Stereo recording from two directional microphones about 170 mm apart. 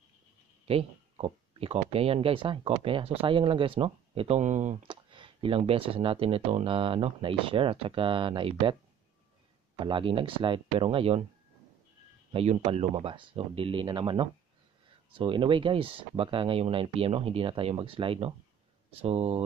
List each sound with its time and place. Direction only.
0.7 s speech: 35° right (ahead or behind)
4.8 s speech: 30° right (ahead or behind)
9.8 s speech: 30° right (ahead or behind)
12.3 s speech: 35° right (ahead or behind)